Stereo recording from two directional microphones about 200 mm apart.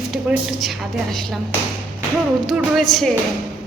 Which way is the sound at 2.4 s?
Centre (ahead or behind).